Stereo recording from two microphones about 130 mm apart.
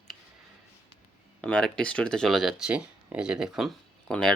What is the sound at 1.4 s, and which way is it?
Speech, 10° left (ahead or behind).